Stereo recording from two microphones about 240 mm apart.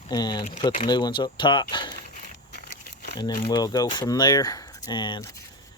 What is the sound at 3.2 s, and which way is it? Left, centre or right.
Speech, centre.